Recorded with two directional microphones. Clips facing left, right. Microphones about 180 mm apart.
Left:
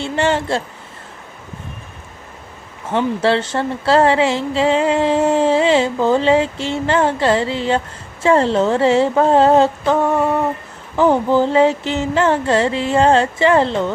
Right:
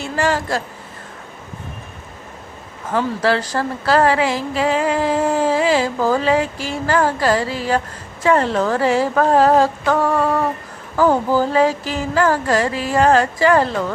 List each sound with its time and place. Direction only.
0.0 s a woman's voice: 25° left (ahead or behind)
2.9 s speech: 25° left (ahead or behind)